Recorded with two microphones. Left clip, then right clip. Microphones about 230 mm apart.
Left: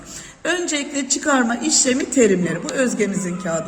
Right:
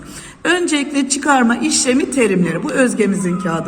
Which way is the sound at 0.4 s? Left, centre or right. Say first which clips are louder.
Right 6 dB; centre.